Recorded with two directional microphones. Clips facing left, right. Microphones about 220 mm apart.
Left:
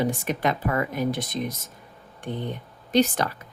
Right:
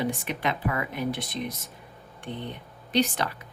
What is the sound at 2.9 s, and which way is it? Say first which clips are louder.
Speech: left 4 dB; 45° left (ahead or behind).